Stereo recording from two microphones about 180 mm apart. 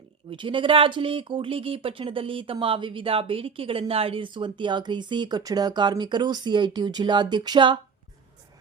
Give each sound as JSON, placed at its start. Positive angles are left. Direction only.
{"t": 0.3, "sound": "speech", "side_deg": -30}